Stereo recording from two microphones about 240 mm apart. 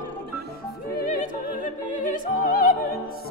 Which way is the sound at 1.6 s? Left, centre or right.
Left.